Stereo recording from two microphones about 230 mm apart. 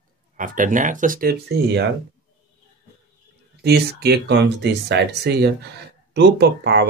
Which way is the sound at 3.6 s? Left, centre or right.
Right.